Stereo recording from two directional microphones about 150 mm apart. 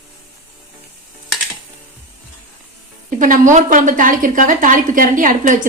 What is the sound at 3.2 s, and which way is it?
A woman's voice, 60° right (ahead or behind).